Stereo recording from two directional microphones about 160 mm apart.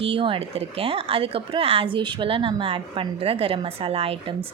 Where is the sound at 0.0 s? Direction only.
35° right (ahead or behind).